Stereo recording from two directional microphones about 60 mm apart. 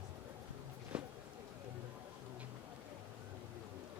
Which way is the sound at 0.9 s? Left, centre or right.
Centre.